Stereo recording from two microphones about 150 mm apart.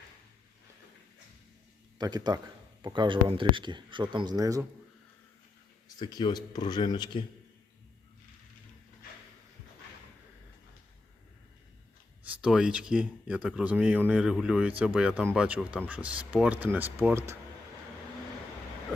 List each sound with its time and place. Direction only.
2.0 s speech: 25° right (ahead or behind)
6.0 s speech: 25° left (ahead or behind)
12.2 s speech: 10° right (ahead or behind)